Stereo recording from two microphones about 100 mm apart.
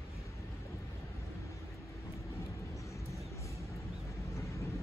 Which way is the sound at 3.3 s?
30° left (ahead or behind).